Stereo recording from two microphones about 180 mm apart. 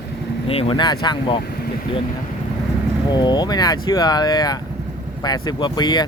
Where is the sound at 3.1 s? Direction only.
25° left (ahead or behind).